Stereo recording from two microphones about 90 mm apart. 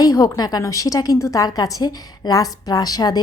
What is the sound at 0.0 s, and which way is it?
A woman's voice, 45° left (ahead or behind).